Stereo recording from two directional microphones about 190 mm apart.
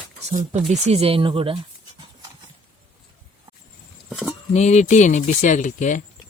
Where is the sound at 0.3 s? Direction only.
35° right (ahead or behind).